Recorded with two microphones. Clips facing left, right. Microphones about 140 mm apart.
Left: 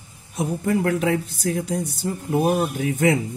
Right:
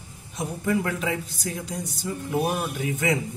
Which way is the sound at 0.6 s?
50° left (ahead or behind).